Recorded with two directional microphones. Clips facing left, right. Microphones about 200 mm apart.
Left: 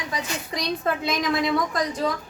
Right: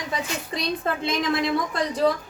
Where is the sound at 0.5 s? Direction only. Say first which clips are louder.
Left 1 dB; 25° right (ahead or behind).